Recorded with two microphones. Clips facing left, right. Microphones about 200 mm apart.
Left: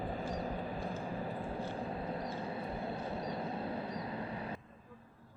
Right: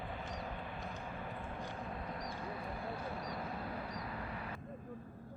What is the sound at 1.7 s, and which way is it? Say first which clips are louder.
Vehicle: left 5 dB; 30° left (ahead or behind).